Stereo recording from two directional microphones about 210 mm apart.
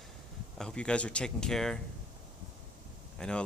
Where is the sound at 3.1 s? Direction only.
5° left (ahead or behind).